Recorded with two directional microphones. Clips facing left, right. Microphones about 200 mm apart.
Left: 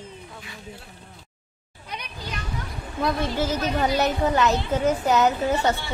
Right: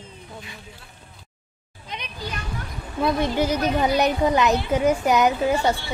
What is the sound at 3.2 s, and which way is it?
A woman's voice, 15° right (ahead or behind).